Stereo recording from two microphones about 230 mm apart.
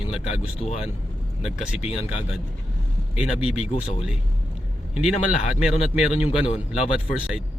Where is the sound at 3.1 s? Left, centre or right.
Centre.